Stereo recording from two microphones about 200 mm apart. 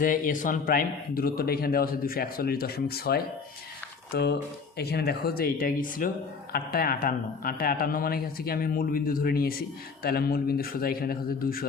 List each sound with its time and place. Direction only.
0.0 s speech: 40° left (ahead or behind)